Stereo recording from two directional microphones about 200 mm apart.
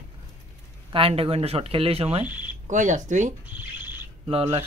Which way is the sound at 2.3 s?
10° right (ahead or behind).